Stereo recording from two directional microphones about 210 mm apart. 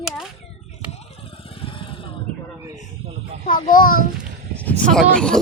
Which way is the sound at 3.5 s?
40° left (ahead or behind).